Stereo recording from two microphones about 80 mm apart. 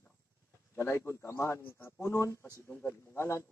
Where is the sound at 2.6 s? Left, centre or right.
Left.